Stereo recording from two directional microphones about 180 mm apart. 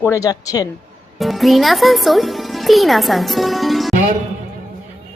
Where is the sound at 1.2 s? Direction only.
Centre (ahead or behind).